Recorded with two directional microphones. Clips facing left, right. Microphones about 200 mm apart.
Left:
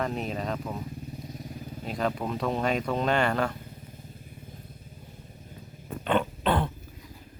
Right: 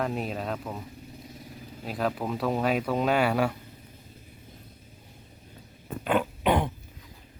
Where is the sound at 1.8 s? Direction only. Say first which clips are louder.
Even; 5° right (ahead or behind).